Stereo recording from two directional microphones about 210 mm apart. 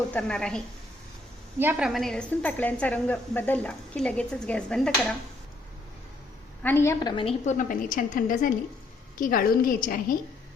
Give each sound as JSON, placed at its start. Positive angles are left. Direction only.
{"t": 0.1, "sound": "a woman's voice", "side_deg": 5}
{"t": 1.5, "sound": "a woman's voice", "side_deg": -5}
{"t": 6.6, "sound": "a woman's voice", "side_deg": 10}
{"t": 7.2, "sound": "a woman's voice", "side_deg": 30}